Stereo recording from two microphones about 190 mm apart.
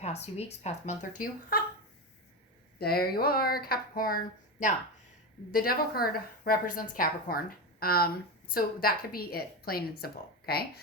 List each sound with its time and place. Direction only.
0.0 s speech: 35° left (ahead or behind); by 1.6 s 50° left (ahead or behind)
2.7 s a woman's voice: 55° left (ahead or behind)
5.5 s a woman's voice: 50° left (ahead or behind)